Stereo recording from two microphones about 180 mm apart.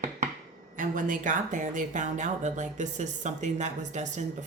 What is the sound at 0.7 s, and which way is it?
Speech, 45° right (ahead or behind).